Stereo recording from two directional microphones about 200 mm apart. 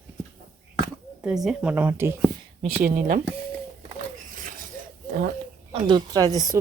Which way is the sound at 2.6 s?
45° right (ahead or behind).